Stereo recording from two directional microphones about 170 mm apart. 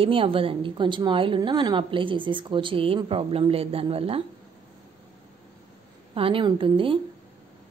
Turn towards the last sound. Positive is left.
turn(degrees=-30)  # may be behind; listen again after turning